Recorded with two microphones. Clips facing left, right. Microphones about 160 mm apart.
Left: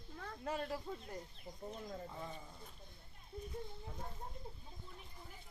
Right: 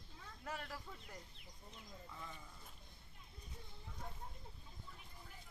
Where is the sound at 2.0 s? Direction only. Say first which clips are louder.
Left 6 dB; 30° left (ahead or behind).